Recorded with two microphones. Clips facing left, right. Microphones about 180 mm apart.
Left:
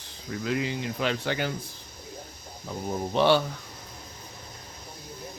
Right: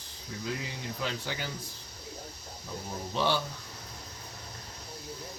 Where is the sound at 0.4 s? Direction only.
75° left (ahead or behind).